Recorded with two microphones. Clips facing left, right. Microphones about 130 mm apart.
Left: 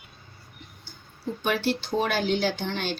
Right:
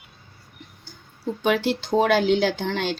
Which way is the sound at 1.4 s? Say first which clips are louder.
Right 4 dB; 90° right.